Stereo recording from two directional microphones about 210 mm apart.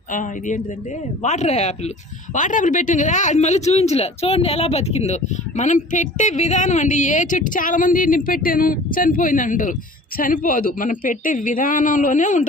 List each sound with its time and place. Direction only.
0.1 s speech: 35° left (ahead or behind)